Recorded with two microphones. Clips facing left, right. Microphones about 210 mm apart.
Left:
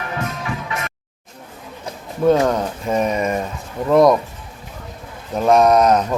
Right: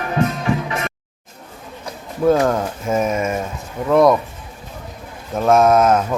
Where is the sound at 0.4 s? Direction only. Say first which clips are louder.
Right 5 dB; 30° right (ahead or behind).